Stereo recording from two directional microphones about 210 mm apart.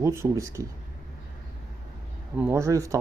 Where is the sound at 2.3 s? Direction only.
10° right (ahead or behind).